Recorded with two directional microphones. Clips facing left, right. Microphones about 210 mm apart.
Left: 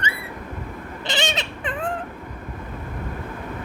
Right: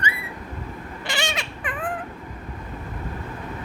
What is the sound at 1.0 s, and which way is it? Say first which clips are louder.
Cat: left 3 dB; 20° left (ahead or behind).